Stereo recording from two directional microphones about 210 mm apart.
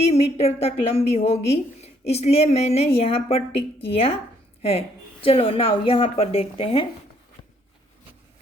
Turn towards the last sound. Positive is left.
turn(degrees=30)  # may be behind; listen again after turning